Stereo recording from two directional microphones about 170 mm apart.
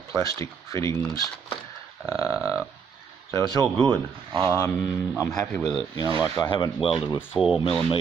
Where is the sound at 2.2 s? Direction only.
10° right (ahead or behind).